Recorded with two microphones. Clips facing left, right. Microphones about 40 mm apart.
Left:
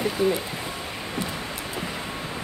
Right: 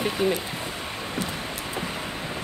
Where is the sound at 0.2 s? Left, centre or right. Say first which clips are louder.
Left 1 dB; right.